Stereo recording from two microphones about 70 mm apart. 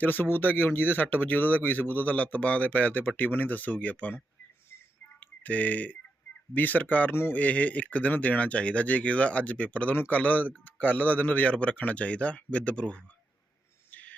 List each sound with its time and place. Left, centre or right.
0.0 s speech: left
5.2 s speech: left
13.9 s a sound: left